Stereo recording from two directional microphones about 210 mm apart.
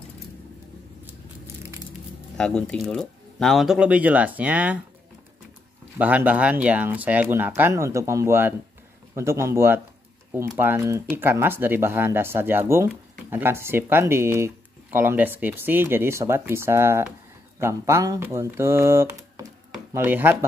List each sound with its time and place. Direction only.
2.3 s speech: 5° left (ahead or behind)
5.9 s speech: 5° right (ahead or behind)